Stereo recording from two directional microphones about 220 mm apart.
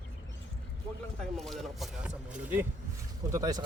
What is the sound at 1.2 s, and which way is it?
Speech, centre (ahead or behind).